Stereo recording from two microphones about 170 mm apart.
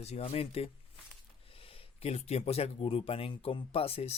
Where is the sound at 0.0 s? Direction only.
40° left (ahead or behind).